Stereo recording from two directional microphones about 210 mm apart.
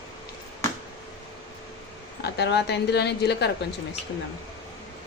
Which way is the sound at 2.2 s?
55° left (ahead or behind).